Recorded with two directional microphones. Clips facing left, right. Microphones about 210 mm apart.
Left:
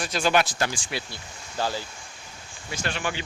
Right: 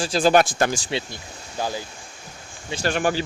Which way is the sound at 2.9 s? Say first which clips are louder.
Right 9 dB; 45° right (ahead or behind).